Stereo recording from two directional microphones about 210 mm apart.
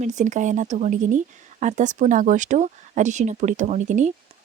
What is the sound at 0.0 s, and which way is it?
Speech, 35° right (ahead or behind).